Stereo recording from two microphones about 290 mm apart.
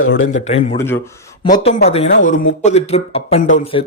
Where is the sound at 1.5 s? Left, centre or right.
Left.